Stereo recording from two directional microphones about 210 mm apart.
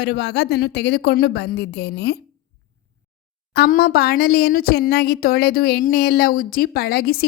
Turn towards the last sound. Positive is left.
turn(degrees=45)  # may be behind; listen again after turning